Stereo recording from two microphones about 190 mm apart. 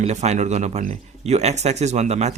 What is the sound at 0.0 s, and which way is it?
Speech, 35° right (ahead or behind).